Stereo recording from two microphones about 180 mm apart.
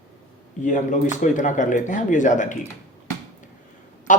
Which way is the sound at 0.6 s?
45° left (ahead or behind).